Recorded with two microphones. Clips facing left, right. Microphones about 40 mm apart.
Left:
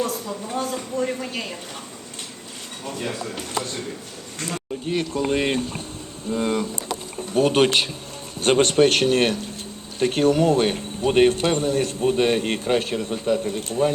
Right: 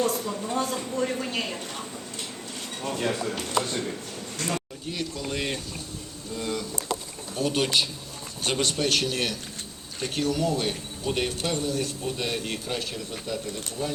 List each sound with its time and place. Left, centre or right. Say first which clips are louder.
0.0 s speech: even; centre
2.8 s speech: right 1 dB; centre
4.9 s a man's voice: left 9 dB; left